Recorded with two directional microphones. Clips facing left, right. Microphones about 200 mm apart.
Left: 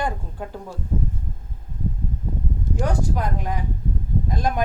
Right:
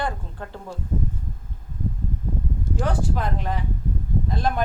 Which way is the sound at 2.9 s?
10° left (ahead or behind).